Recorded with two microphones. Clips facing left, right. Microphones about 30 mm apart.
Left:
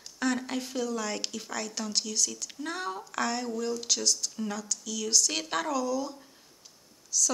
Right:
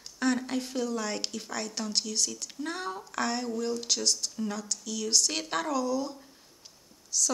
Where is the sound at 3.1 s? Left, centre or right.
Centre.